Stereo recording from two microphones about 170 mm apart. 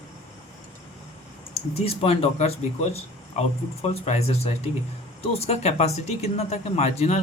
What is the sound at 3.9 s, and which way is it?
Speech, 35° left (ahead or behind).